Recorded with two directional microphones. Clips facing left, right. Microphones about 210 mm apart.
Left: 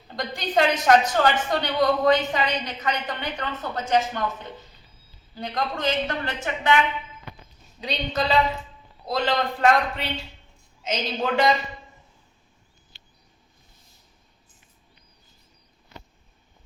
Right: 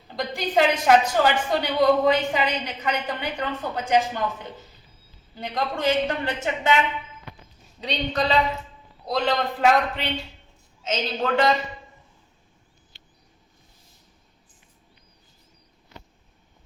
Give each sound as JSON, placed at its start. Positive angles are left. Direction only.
{"t": 0.1, "sound": "a woman's voice", "side_deg": -5}
{"t": 5.4, "sound": "a man's voice", "side_deg": -5}
{"t": 7.8, "sound": "a man's voice", "side_deg": 0}